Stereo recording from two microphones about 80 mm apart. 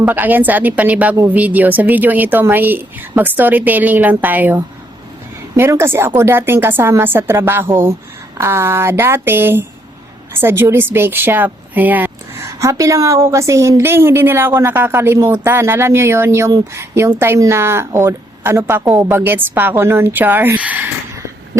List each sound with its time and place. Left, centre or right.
0.0 s a woman's voice: right
5.5 s a woman's voice: right
12.4 s a woman's voice: right